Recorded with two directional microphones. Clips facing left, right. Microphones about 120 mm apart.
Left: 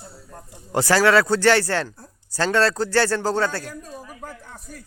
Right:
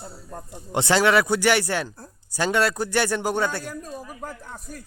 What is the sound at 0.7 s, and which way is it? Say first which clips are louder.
Speech: left 2 dB; 20° right (ahead or behind).